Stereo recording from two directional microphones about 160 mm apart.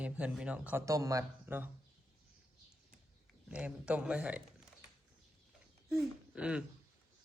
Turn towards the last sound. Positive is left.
turn(degrees=-5)  # may be behind; listen again after turning